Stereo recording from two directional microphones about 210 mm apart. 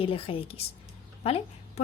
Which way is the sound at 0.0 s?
25° left (ahead or behind).